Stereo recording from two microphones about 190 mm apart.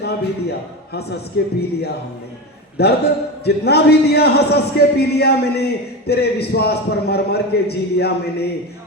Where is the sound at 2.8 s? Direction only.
60° left (ahead or behind).